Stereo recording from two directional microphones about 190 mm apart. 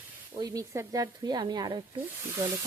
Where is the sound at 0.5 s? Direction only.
15° right (ahead or behind).